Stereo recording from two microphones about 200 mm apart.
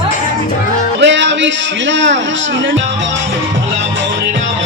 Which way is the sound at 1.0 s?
65° right (ahead or behind).